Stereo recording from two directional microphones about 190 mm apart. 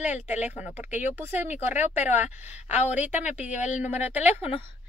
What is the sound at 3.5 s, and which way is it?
Speech, 40° left (ahead or behind).